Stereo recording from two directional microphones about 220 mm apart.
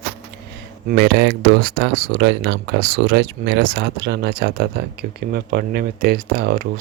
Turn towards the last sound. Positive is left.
turn(degrees=-40)  # may be behind; listen again after turning